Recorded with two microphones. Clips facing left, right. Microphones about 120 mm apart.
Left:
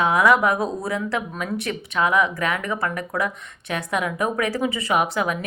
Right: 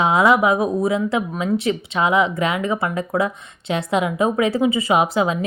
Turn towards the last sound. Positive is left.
turn(degrees=-20)  # may be behind; listen again after turning